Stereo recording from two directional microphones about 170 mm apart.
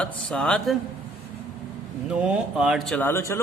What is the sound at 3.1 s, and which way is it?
Speech, 15° left (ahead or behind).